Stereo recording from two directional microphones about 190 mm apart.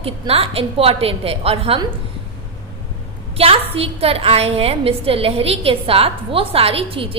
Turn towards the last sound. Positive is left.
turn(degrees=-30)  # may be behind; listen again after turning